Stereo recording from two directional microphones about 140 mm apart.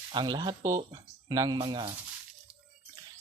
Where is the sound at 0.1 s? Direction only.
35° right (ahead or behind).